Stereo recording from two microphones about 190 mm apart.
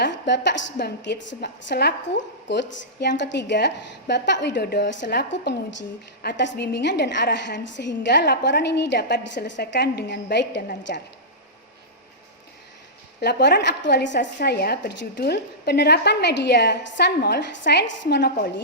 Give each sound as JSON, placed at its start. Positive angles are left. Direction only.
{"t": 0.0, "sound": "a woman's voice", "side_deg": 65}
{"t": 13.1, "sound": "a woman's voice", "side_deg": 60}
{"t": 14.3, "sound": "a woman's voice", "side_deg": 55}